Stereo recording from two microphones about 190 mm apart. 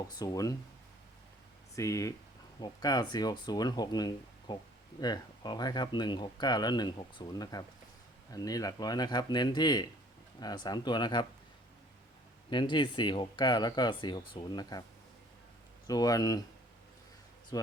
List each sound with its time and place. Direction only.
0.1 s speech: 20° left (ahead or behind)
1.7 s speech: 15° left (ahead or behind)
12.5 s speech: 25° left (ahead or behind)
15.9 s speech: 20° left (ahead or behind)
17.5 s speech: 20° left (ahead or behind)